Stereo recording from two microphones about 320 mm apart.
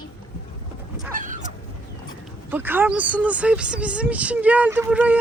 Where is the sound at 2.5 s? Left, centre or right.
Centre.